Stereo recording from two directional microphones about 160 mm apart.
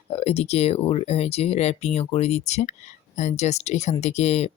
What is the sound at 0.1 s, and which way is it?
Speech, 40° left (ahead or behind).